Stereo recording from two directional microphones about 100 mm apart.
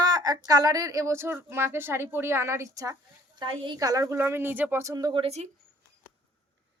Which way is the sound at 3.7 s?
35° right (ahead or behind).